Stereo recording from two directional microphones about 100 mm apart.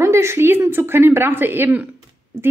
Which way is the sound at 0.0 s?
30° right (ahead or behind).